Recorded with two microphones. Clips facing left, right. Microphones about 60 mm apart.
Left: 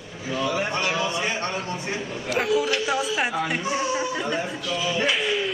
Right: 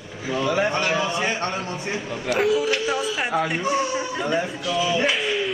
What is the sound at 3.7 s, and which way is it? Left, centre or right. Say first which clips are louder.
Speech: right 1 dB; centre.